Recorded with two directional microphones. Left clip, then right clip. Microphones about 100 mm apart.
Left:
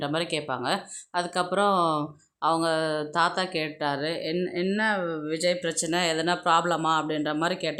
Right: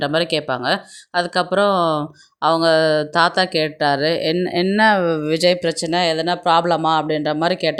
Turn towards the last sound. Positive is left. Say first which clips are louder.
# right 9 dB
turn(degrees=-60)  # may be behind; listen again after turning